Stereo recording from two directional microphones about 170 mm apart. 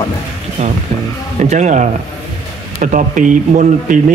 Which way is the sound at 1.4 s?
45° right (ahead or behind).